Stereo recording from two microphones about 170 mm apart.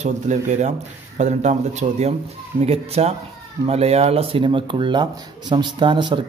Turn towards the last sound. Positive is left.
turn(degrees=-25)  # may be behind; listen again after turning